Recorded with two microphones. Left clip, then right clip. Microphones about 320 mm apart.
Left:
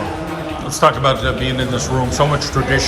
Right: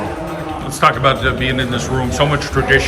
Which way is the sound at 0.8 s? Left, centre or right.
Centre.